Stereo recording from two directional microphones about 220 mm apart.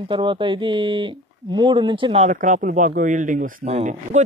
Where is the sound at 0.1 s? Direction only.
20° right (ahead or behind).